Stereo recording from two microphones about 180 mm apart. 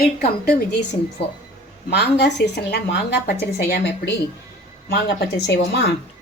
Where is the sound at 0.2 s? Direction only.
65° left (ahead or behind).